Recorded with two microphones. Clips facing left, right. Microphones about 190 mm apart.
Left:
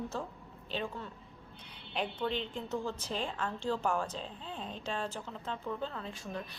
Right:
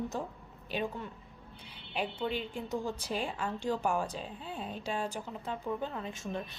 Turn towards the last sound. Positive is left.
turn(degrees=-20)  # may be behind; listen again after turning